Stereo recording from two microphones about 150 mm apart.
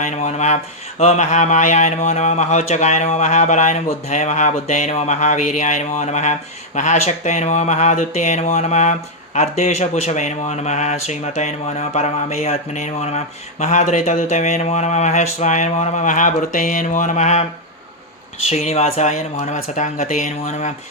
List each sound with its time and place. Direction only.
0.0 s speech: 55° left (ahead or behind)